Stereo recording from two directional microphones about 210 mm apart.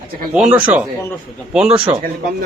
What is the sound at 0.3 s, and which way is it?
A man's voice, 5° right (ahead or behind).